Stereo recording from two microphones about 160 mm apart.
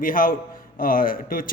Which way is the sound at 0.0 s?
60° left (ahead or behind).